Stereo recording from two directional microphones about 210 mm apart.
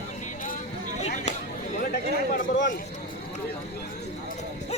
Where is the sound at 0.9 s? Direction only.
30° left (ahead or behind).